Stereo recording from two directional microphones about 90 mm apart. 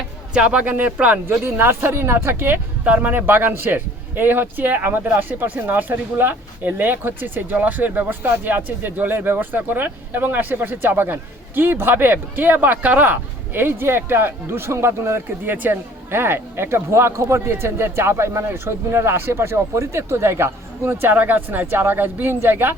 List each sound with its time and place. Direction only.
0.3 s speech: 15° right (ahead or behind)
1.3 s a man's voice: 25° right (ahead or behind)